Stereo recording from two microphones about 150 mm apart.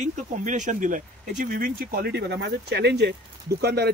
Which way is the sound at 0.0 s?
55° right (ahead or behind).